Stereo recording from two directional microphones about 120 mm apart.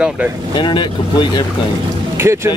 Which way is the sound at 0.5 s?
40° left (ahead or behind).